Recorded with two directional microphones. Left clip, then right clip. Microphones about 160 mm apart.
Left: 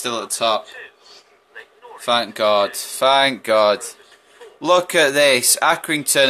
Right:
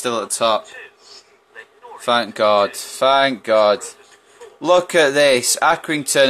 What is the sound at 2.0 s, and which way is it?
Speech, 35° right (ahead or behind).